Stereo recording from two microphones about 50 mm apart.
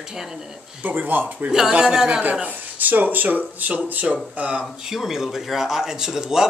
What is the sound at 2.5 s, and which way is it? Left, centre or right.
Speech, right.